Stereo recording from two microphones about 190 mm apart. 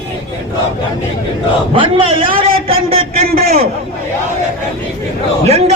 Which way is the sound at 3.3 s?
55° right (ahead or behind).